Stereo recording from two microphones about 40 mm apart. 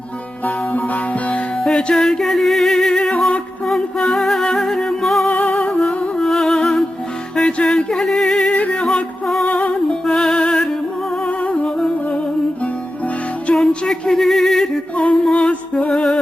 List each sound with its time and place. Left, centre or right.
1.6 s music: centre
5.3 s music: left
6.1 s music: centre
7.8 s a sound: centre
8.4 s music: left
10.1 s music: centre
11.3 s humming: left
11.6 s humming: centre
13.6 s a sound: centre
15.4 s music: left
15.9 s music: centre